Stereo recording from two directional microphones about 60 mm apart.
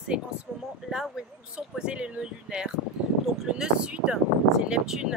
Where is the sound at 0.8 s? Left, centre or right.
Centre.